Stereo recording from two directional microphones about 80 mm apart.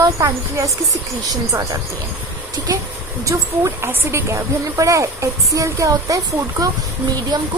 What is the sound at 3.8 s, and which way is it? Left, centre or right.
A woman's voice, right.